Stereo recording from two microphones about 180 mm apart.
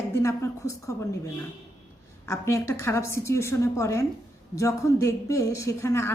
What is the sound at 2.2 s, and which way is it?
A woman's voice, 15° left (ahead or behind).